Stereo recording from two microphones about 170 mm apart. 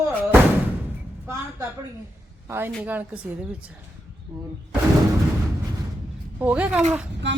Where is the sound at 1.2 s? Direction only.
15° right (ahead or behind).